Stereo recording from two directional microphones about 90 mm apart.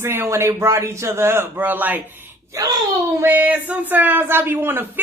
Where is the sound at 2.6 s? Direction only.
40° right (ahead or behind).